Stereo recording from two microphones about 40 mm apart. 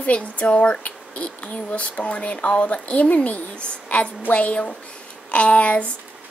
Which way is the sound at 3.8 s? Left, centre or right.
Left.